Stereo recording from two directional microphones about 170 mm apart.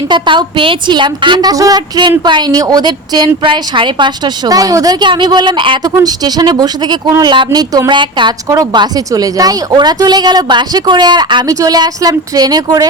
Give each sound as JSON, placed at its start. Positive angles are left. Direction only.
{"t": 0.1, "sound": "a woman's voice", "side_deg": -25}